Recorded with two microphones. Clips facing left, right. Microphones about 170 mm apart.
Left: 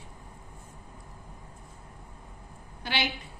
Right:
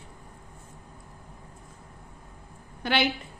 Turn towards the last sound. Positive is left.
turn(degrees=-55)  # may be behind; listen again after turning